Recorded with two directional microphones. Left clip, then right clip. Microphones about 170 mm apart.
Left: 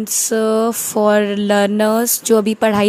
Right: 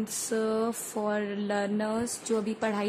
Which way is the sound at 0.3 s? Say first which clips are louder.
Left 13 dB; 45° left (ahead or behind).